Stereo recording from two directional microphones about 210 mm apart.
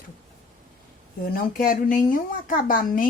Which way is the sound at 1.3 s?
40° left (ahead or behind).